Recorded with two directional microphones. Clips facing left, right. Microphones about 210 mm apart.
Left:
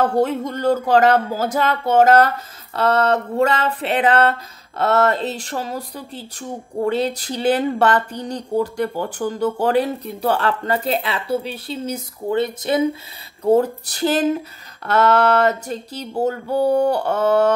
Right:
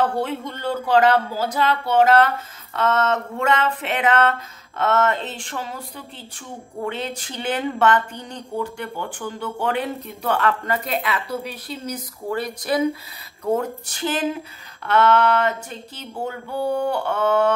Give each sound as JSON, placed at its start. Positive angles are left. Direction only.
{"t": 0.0, "sound": "speech", "side_deg": 45}